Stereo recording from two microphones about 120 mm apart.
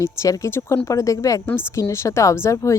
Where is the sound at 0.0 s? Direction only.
25° left (ahead or behind).